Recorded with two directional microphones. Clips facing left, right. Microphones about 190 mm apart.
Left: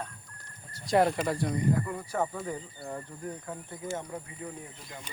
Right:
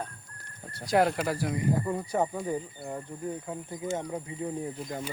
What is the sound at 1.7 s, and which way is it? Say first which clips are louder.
Speech: right 2 dB; 25° right (ahead or behind).